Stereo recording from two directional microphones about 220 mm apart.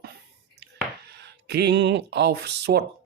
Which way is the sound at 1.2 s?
50° right (ahead or behind).